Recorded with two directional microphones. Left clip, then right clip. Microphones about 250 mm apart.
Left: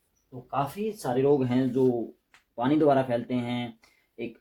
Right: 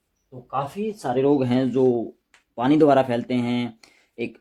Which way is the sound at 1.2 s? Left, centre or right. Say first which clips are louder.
Right 3 dB; right.